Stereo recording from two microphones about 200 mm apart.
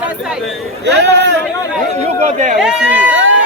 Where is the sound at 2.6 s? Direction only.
5° right (ahead or behind).